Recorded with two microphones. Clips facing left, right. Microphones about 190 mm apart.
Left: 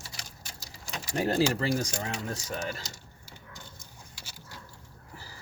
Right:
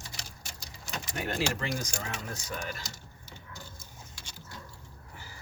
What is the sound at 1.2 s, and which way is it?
Speech, 35° left (ahead or behind).